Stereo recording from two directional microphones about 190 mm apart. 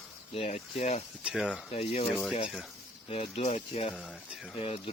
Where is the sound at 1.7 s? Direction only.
30° left (ahead or behind).